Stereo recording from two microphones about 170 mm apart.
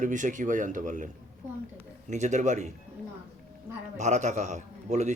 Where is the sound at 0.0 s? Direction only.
50° right (ahead or behind).